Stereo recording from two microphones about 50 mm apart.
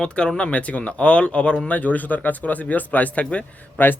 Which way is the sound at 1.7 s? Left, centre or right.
Left.